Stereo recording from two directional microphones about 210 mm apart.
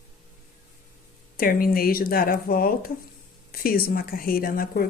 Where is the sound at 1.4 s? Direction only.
45° left (ahead or behind).